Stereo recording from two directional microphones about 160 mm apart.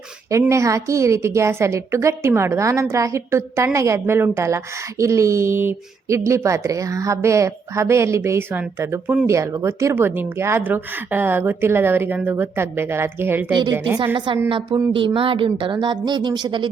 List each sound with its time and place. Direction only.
0.3 s a woman's voice: 20° right (ahead or behind)
14.5 s speech: 30° right (ahead or behind)